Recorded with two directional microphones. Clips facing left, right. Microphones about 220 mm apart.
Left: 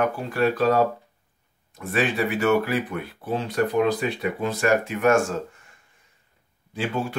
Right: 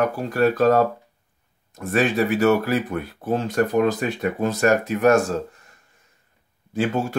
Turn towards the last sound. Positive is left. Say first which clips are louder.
# right 5 dB
turn(degrees=-45)  # may be behind; listen again after turning